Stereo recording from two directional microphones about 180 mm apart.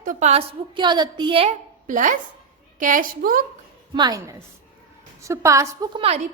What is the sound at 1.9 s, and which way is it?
A woman's voice, 45° right (ahead or behind).